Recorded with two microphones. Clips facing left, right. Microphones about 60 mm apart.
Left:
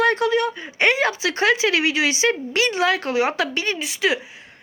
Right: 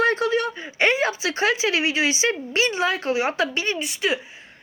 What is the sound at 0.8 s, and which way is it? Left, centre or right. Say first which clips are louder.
Speech: left 1 dB; left.